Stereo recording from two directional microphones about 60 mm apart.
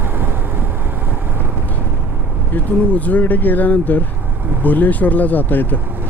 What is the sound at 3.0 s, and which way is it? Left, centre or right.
Speech, left.